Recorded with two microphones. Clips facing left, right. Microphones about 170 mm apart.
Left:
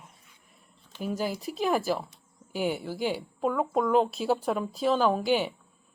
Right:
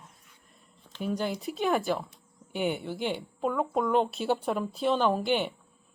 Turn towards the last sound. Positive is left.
turn(degrees=5)  # may be behind; listen again after turning